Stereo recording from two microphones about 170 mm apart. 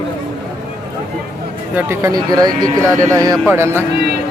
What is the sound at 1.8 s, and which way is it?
Speech, 15° right (ahead or behind).